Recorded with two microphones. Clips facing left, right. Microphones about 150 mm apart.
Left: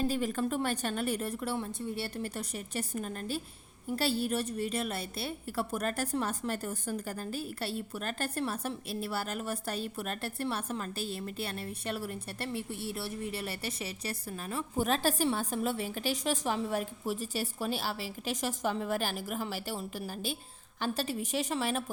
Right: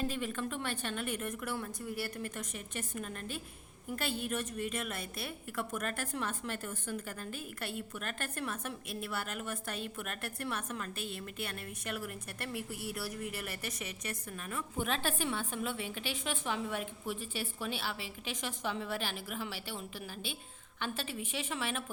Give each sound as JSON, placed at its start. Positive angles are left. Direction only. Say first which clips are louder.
{"t": 0.1, "sound": "a woman's voice", "louder": "left 6 dB", "side_deg": 40}